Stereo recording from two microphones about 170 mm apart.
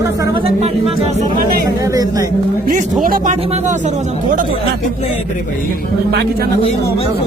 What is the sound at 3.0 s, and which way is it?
Speech, 55° right (ahead or behind).